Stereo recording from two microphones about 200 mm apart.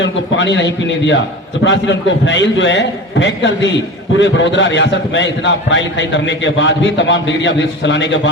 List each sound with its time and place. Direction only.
0.0 s a man's voice: 65° left (ahead or behind)